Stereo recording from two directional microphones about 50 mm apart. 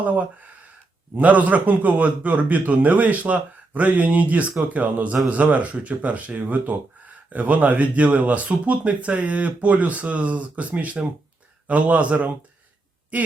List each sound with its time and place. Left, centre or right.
0.0 s a man's voice: right